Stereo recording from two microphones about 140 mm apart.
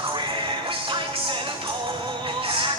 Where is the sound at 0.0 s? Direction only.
35° right (ahead or behind).